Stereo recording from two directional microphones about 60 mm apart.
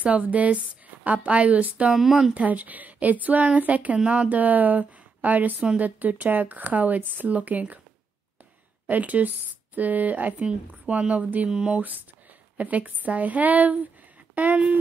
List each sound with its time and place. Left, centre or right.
0.0 s speech: right
1.9 s speech: centre
2.3 s speech: right
8.8 s speech: right